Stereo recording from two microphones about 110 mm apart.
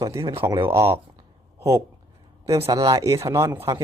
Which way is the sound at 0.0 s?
30° right (ahead or behind).